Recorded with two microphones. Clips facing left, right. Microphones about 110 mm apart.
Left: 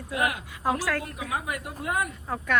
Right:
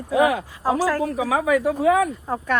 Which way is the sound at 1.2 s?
90° right.